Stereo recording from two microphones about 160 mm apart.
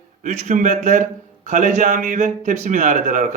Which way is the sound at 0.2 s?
50° right (ahead or behind).